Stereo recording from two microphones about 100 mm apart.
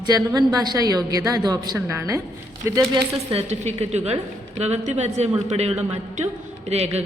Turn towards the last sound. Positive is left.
turn(degrees=-90)